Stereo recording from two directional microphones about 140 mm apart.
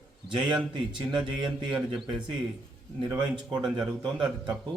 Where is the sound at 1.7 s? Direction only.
5° right (ahead or behind).